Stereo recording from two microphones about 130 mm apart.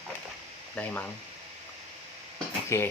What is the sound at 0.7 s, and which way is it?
Speech, 10° left (ahead or behind).